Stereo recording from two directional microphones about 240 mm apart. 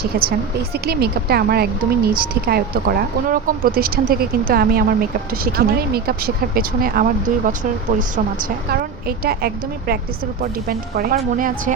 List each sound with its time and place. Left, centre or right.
0.0 s speech: right